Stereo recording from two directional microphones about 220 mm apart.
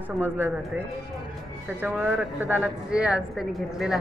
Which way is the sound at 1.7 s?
5° right (ahead or behind).